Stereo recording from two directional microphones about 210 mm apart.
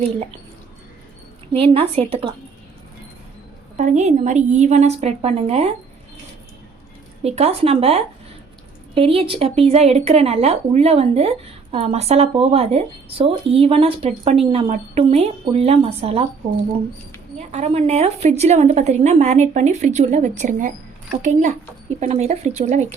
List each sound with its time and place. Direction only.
1.5 s speech: 25° right (ahead or behind)
3.8 s a woman's voice: 35° right (ahead or behind)
7.3 s speech: 30° right (ahead or behind)
17.3 s a woman's voice: 30° right (ahead or behind)